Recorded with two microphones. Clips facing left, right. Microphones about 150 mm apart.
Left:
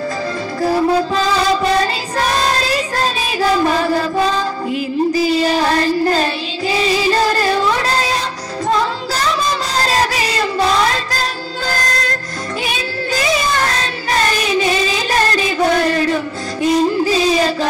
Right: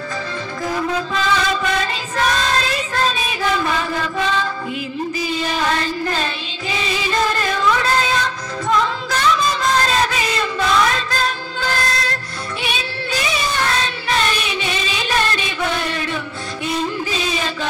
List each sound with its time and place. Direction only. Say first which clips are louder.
0.6 s music: left 8 dB; 35° left (ahead or behind)
5.3 s child singing: left 6 dB; 35° left (ahead or behind)
6.7 s female singing: left 6 dB; 35° left (ahead or behind)
12.6 s child singing: left 2 dB; 40° left (ahead or behind)
16.6 s music: left 9 dB; 35° left (ahead or behind)